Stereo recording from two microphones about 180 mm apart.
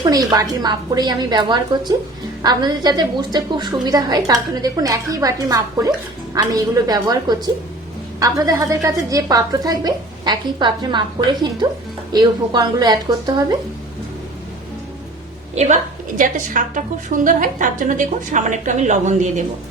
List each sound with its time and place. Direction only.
0.0 s a woman's voice: 20° right (ahead or behind)
15.5 s a woman's voice: 40° right (ahead or behind)